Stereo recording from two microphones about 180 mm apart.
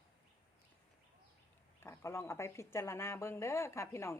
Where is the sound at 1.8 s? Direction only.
15° left (ahead or behind).